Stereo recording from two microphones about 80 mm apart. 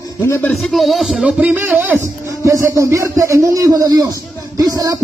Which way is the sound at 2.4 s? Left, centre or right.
Right.